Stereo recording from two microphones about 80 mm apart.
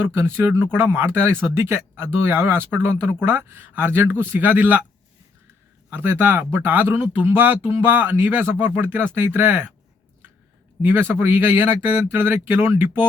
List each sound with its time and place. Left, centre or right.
0.1 s speech: right
5.9 s speech: right
10.8 s speech: right